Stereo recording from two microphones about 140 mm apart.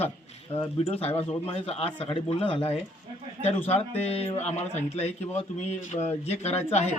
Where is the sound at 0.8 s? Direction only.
50° left (ahead or behind).